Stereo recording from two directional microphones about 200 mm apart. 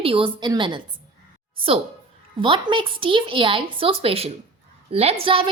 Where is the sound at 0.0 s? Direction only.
25° right (ahead or behind).